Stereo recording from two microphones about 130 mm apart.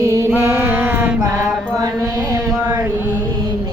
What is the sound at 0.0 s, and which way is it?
Music, 25° right (ahead or behind).